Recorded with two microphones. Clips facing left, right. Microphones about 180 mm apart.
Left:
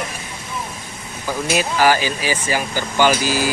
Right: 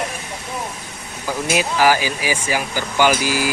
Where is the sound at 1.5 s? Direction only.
10° right (ahead or behind).